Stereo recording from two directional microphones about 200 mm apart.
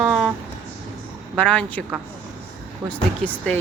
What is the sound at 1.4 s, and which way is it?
Speech, 5° left (ahead or behind).